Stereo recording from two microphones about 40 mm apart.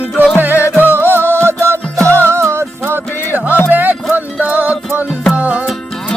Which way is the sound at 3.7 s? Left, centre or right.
Right.